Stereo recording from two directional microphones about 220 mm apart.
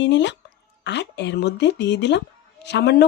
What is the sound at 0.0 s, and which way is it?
Speech, 55° left (ahead or behind).